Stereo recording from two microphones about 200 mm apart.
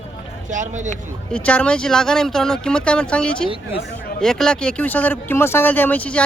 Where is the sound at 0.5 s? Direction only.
40° right (ahead or behind).